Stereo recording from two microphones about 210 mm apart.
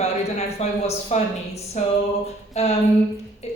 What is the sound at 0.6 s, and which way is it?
Speech, 30° left (ahead or behind).